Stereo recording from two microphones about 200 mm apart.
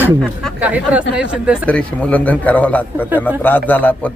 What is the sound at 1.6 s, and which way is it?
Speech, 5° left (ahead or behind).